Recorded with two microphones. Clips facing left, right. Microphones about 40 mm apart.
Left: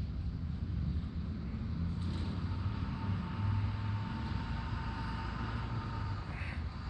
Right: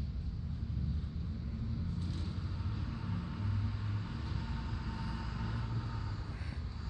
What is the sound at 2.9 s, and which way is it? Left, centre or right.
Vehicle, centre.